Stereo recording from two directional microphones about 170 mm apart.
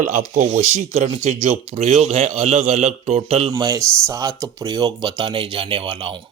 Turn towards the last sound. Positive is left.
turn(degrees=-30)  # may be behind; listen again after turning